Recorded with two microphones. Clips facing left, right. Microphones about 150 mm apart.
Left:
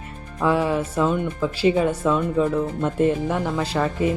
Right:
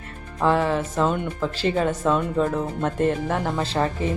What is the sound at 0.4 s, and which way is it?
Speech, 10° left (ahead or behind).